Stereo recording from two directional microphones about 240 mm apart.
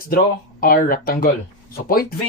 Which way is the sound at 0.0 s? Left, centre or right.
Left.